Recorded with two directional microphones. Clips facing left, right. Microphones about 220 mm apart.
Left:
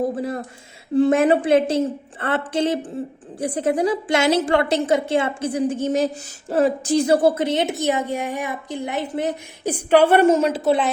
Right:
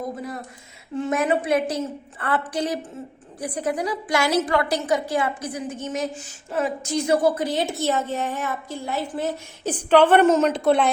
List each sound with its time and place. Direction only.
0.0 s a woman's voice: 30° left (ahead or behind); by 10.9 s centre (ahead or behind)